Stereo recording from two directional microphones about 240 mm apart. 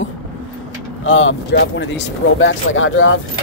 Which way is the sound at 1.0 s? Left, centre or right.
Left.